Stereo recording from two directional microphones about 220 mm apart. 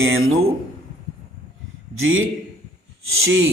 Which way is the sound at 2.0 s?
65° right (ahead or behind).